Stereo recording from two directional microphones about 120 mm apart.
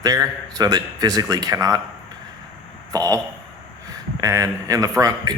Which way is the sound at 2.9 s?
30° right (ahead or behind).